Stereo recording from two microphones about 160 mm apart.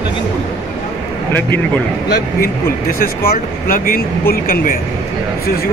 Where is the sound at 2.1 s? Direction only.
65° left (ahead or behind).